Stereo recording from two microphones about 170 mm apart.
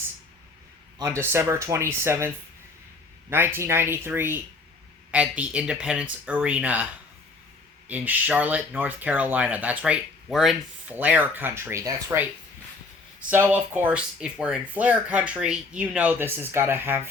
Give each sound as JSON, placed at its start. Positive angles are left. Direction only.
{"t": 0.9, "sound": "speech", "side_deg": -15}
{"t": 7.9, "sound": "speech", "side_deg": -10}